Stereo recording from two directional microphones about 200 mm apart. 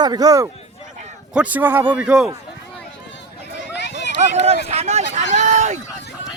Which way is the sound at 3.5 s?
60° left (ahead or behind).